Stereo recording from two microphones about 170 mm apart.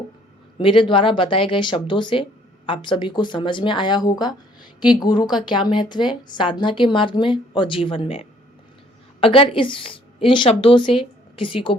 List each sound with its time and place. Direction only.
0.6 s a woman's voice: 30° left (ahead or behind)